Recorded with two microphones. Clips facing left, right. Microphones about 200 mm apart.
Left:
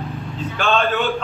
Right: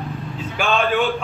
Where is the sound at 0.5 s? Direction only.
15° right (ahead or behind).